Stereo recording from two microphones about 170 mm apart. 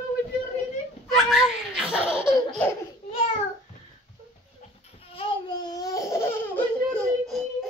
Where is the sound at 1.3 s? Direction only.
5° right (ahead or behind).